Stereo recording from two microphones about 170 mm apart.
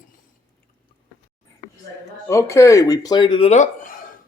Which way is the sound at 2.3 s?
15° left (ahead or behind).